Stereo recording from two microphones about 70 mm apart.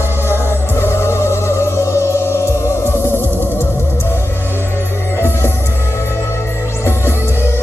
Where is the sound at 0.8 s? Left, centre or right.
Left.